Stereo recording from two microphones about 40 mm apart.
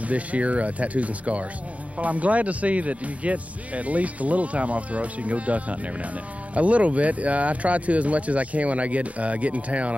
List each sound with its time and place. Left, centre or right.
0.0 s speech: right